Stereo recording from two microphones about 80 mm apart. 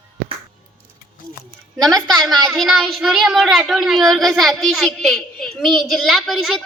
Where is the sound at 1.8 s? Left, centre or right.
Centre.